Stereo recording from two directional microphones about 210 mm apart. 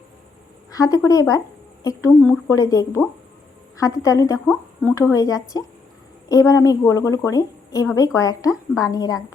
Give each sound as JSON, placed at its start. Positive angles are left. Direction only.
{"t": 0.7, "sound": "a woman's voice", "side_deg": 15}